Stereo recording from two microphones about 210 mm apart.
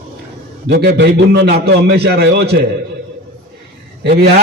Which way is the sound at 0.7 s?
50° right (ahead or behind).